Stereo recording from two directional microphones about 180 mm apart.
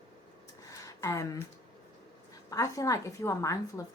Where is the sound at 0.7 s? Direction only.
15° left (ahead or behind).